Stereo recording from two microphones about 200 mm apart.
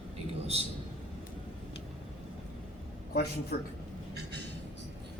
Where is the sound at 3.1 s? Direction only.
55° left (ahead or behind).